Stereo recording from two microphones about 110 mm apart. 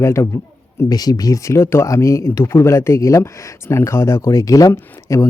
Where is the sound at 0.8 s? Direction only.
35° left (ahead or behind).